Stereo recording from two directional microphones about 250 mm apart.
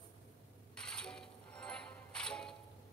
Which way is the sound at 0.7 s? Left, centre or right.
Centre.